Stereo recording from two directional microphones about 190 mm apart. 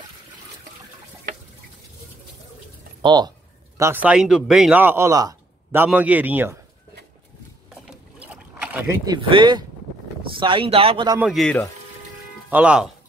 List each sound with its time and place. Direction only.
3.0 s a man's voice: 25° right (ahead or behind)
7.8 s boat: 5° right (ahead or behind)
9.0 s speech: 20° right (ahead or behind)
11.1 s a man's voice: centre (ahead or behind)